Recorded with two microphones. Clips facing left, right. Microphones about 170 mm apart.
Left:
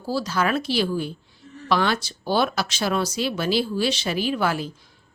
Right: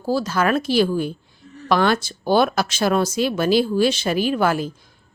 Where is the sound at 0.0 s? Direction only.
50° right (ahead or behind).